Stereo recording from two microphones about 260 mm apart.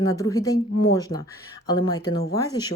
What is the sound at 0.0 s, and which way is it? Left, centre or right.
A woman's voice, centre.